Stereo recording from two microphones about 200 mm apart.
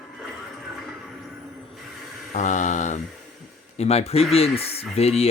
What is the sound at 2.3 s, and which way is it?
Mantra, 35° left (ahead or behind).